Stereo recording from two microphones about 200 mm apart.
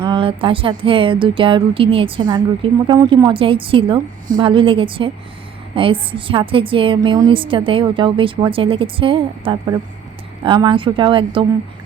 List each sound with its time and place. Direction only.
0.0 s speech: 25° right (ahead or behind)